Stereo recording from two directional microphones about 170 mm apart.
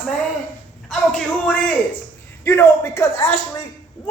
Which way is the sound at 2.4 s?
15° left (ahead or behind).